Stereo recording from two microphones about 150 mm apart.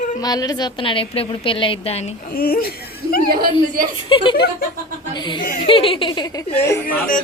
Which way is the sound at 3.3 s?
75° right (ahead or behind).